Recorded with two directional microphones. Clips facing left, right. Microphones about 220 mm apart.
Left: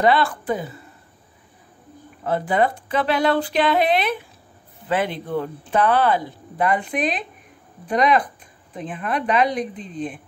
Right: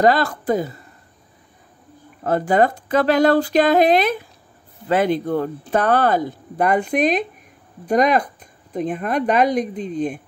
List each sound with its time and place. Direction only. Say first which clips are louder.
0.0 s speech: right 2 dB; 40° right (ahead or behind)
2.2 s speech: right 3 dB; 45° right (ahead or behind)